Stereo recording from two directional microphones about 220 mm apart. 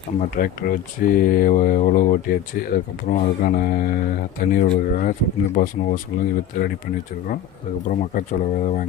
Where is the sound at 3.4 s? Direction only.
40° left (ahead or behind).